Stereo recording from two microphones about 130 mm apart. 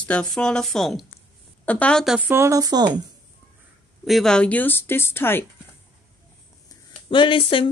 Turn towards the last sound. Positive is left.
turn(degrees=40)  # may be behind; listen again after turning